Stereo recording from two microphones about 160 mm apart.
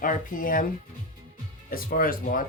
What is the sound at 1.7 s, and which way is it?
Speech, 65° left (ahead or behind).